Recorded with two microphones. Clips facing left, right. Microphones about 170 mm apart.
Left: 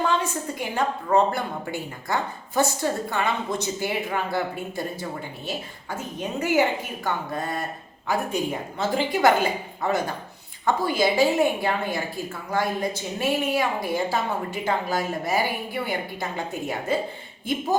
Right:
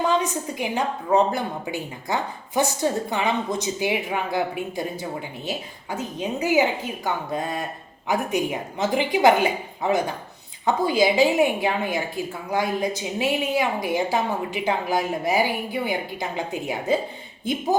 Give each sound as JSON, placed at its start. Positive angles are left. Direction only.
{"t": 0.2, "sound": "a woman's voice", "side_deg": -15}